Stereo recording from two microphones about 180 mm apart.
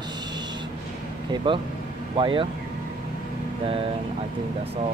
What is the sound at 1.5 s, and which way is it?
Speech, 25° right (ahead or behind).